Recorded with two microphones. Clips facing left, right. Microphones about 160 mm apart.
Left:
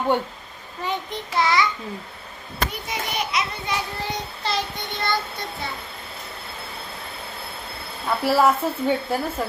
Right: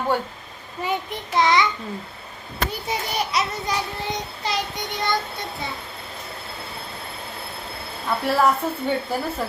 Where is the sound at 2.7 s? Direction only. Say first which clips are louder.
Right 2 dB; 35° right (ahead or behind).